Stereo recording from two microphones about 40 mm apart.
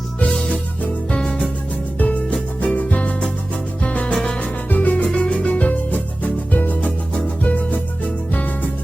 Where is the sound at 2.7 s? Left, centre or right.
Left.